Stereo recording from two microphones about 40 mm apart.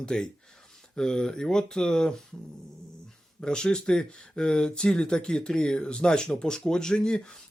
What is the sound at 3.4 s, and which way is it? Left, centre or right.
Speech, left.